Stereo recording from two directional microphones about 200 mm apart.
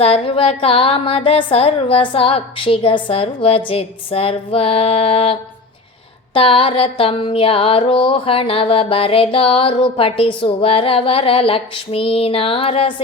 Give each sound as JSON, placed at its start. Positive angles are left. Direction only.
{"t": 0.0, "sound": "music", "side_deg": 25}